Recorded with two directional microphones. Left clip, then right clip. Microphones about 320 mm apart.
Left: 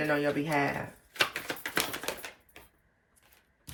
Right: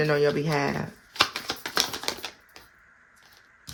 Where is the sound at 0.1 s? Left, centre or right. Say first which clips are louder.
Right 5 dB; right.